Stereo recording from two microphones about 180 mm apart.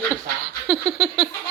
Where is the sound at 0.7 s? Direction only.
5° right (ahead or behind).